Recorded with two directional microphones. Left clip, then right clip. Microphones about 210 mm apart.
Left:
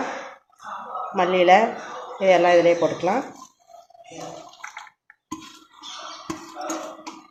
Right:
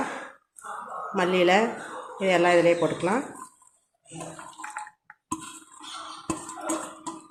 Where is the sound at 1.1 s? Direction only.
30° right (ahead or behind).